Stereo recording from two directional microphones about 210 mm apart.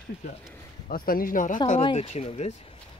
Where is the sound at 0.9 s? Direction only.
45° left (ahead or behind).